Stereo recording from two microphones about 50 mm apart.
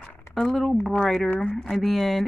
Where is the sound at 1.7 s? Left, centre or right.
Centre.